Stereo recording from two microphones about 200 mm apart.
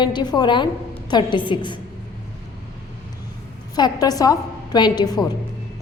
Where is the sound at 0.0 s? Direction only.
20° left (ahead or behind).